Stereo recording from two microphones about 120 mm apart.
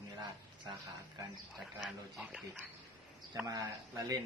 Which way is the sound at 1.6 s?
Centre (ahead or behind).